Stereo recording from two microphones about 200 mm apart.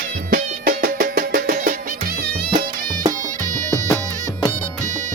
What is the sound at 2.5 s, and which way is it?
Music, 20° right (ahead or behind).